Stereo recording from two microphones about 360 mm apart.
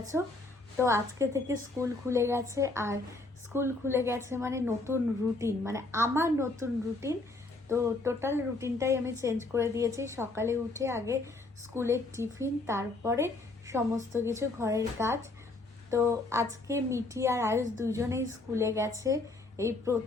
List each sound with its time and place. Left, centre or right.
0.1 s a woman's voice: centre